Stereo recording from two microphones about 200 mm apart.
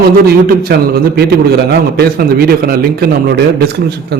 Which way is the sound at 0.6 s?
50° right (ahead or behind).